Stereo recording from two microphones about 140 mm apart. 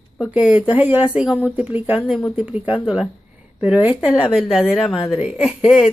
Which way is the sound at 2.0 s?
Centre (ahead or behind).